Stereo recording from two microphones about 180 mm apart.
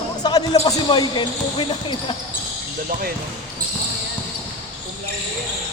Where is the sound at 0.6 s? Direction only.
25° left (ahead or behind).